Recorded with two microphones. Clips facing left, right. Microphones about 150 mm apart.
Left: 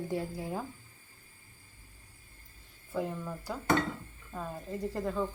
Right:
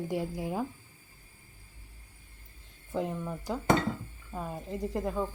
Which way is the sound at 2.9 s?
20° right (ahead or behind).